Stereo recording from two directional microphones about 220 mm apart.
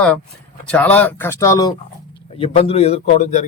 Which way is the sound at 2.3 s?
25° left (ahead or behind).